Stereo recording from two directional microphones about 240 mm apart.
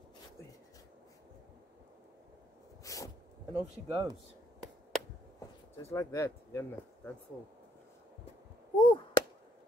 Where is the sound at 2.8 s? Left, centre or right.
Centre.